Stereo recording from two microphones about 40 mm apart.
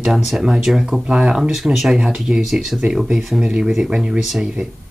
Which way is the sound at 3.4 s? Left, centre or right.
Right.